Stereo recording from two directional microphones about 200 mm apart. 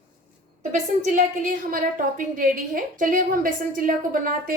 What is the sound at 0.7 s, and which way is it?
A woman's voice, 40° right (ahead or behind).